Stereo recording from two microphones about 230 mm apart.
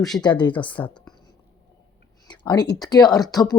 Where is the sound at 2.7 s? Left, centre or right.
Centre.